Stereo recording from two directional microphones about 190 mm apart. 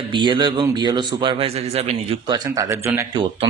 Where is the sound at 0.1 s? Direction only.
25° right (ahead or behind).